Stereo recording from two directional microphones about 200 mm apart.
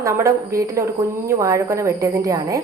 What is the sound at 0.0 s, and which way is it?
A woman's voice, 15° right (ahead or behind).